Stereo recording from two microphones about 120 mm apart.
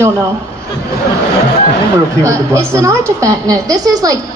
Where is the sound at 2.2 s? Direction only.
25° right (ahead or behind).